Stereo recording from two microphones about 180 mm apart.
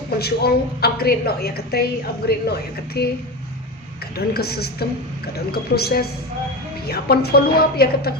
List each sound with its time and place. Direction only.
0.2 s a woman's voice: 60° left (ahead or behind)
4.4 s a woman's voice: 60° left (ahead or behind)